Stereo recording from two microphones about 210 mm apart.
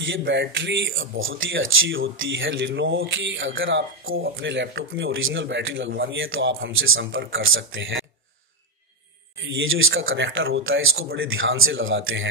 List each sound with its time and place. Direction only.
0.0 s speech: 65° right (ahead or behind)
9.5 s a man's voice: 70° right (ahead or behind)